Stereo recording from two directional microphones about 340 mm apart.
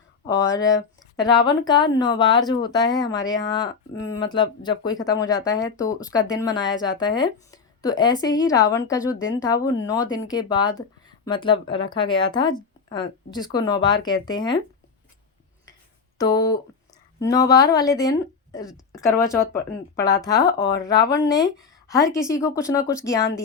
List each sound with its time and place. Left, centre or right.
0.3 s speech: centre
16.1 s speech: centre